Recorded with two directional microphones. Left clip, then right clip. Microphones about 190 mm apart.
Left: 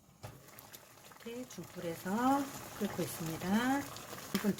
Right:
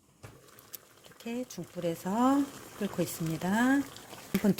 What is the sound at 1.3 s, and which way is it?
Speech, 35° right (ahead or behind).